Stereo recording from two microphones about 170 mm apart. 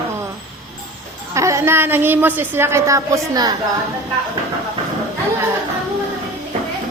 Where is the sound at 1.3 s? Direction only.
15° right (ahead or behind).